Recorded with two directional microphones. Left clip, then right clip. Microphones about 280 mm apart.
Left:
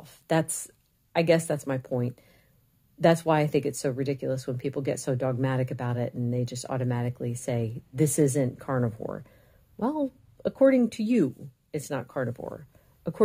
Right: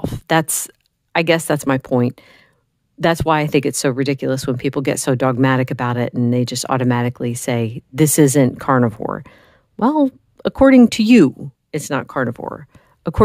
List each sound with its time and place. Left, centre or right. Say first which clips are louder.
0.3 s speech: right 9 dB; right